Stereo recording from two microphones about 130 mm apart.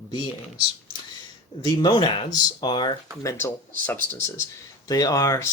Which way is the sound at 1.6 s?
35° left (ahead or behind).